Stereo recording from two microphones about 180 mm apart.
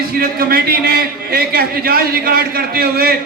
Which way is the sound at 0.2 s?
55° right (ahead or behind).